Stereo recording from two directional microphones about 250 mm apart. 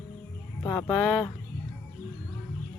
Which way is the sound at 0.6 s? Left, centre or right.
Centre.